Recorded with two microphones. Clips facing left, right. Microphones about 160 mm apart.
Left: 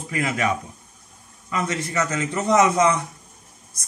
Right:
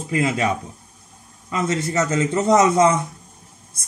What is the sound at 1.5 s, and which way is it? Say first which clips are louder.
Speech: right 3 dB; 30° right (ahead or behind).